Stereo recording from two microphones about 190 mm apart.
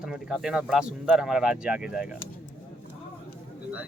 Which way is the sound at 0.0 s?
Centre (ahead or behind).